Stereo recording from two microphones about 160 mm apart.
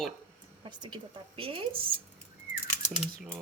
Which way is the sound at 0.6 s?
30° right (ahead or behind).